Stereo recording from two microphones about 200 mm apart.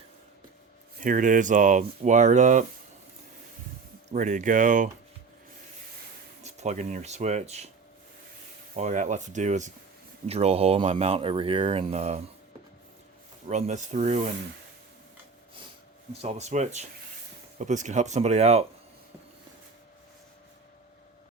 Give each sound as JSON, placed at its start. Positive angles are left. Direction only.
{"t": 0.9, "sound": "speech", "side_deg": -40}
{"t": 4.1, "sound": "speech", "side_deg": -40}
{"t": 6.4, "sound": "speech", "side_deg": -35}
{"t": 8.7, "sound": "speech", "side_deg": -35}
{"t": 13.5, "sound": "speech", "side_deg": -35}
{"t": 16.2, "sound": "speech", "side_deg": -35}